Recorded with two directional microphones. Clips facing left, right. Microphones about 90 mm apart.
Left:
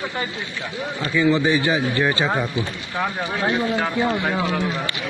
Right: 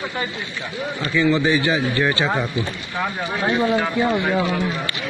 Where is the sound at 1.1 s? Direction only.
20° left (ahead or behind).